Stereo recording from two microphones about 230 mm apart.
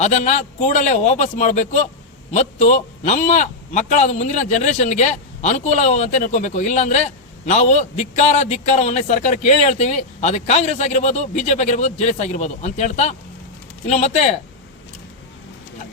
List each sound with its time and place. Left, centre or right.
0.0 s a man's voice: left